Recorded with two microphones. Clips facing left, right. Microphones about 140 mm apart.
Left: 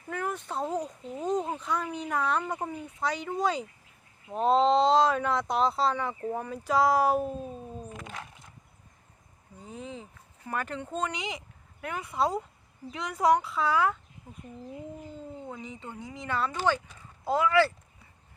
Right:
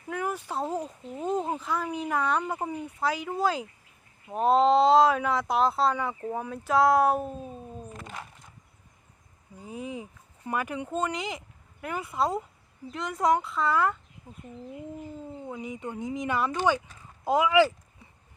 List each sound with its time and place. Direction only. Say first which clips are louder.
0.1 s speech: right 2 dB; 5° right (ahead or behind)
2.4 s speech: right 2 dB; 10° right (ahead or behind)
9.6 s speech: right 4 dB; 10° right (ahead or behind); by 14.4 s 5° left (ahead or behind)
15.4 s speech: right 5 dB; 10° right (ahead or behind)